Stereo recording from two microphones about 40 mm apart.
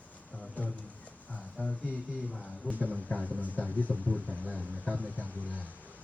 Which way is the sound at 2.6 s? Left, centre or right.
Left.